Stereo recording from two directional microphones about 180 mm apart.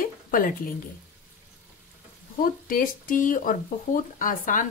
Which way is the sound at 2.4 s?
50° left (ahead or behind).